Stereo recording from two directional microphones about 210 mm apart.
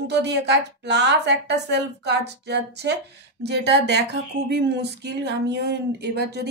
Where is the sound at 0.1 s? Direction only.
55° right (ahead or behind).